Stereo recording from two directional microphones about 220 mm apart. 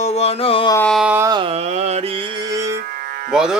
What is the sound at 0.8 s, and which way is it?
Carnatic music, centre (ahead or behind).